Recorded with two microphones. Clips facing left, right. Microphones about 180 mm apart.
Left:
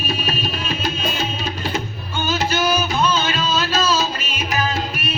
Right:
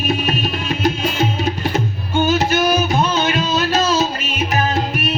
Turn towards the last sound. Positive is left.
turn(degrees=-20)  # may be behind; listen again after turning